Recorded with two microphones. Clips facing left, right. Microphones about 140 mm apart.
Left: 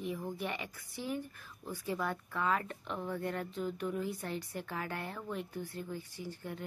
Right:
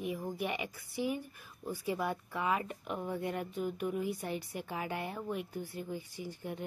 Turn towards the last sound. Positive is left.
turn(degrees=-15)  # may be behind; listen again after turning